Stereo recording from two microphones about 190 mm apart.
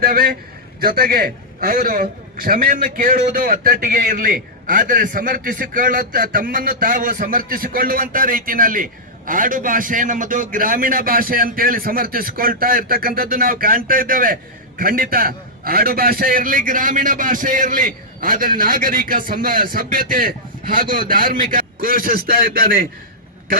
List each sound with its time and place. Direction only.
0.0 s a man's voice: 50° right (ahead or behind)